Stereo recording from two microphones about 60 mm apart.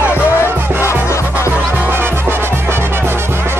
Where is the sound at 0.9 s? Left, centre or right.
Left.